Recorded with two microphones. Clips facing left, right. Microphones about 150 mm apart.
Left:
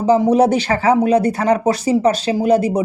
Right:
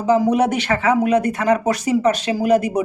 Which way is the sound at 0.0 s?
30° left (ahead or behind).